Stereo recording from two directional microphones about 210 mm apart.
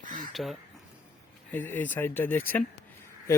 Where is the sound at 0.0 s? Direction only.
40° right (ahead or behind).